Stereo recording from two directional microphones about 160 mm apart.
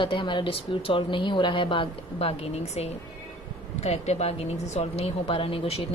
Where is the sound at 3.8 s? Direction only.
40° left (ahead or behind).